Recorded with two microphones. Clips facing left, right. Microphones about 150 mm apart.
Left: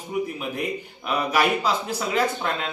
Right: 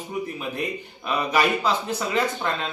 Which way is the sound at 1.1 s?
10° left (ahead or behind).